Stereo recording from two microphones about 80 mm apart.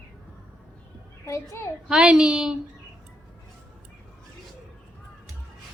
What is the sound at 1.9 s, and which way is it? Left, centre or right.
Speech, centre.